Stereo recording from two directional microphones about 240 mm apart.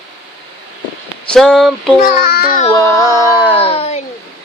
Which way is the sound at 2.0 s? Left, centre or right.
Left.